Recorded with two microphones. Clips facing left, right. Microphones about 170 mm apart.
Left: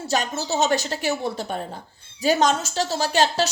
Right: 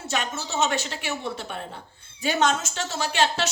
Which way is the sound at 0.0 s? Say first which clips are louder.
Left 4 dB; 35° left (ahead or behind).